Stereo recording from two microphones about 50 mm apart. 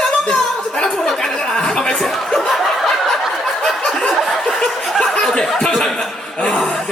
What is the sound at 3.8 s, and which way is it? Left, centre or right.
Snicker, centre.